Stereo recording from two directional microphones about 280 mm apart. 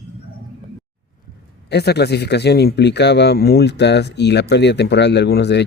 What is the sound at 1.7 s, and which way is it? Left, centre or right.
Speech, left.